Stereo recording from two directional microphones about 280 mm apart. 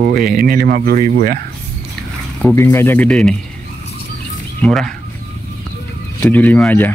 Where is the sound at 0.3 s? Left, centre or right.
Right.